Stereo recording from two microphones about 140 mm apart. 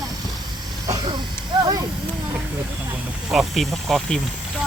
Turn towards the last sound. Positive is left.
turn(degrees=0)  # may be behind; listen again after turning